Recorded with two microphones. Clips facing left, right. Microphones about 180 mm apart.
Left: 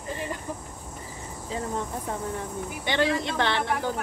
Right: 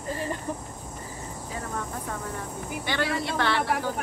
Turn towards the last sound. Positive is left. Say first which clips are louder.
# even
turn(degrees=20)  # may be behind; listen again after turning